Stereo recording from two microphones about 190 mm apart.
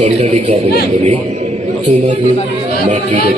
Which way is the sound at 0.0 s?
35° right (ahead or behind).